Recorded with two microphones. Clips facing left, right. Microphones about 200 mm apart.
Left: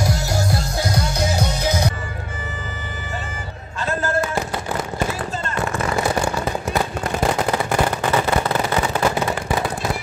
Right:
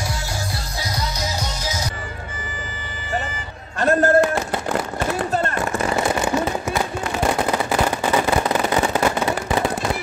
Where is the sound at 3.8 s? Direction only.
65° right (ahead or behind).